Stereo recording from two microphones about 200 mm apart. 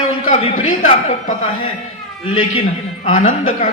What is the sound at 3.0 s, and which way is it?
Speech, 40° left (ahead or behind).